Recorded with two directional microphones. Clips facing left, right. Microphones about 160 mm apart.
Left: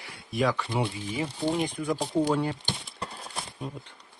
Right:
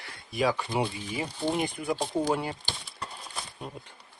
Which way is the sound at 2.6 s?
25° left (ahead or behind).